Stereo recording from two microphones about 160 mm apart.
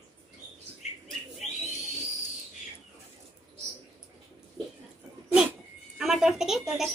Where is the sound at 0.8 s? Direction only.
45° left (ahead or behind).